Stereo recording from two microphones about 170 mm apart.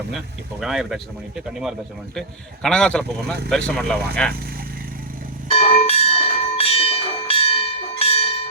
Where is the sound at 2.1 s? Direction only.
5° left (ahead or behind).